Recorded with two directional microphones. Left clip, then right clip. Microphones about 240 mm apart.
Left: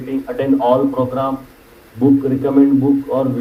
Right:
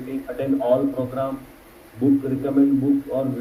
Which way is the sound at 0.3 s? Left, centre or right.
Left.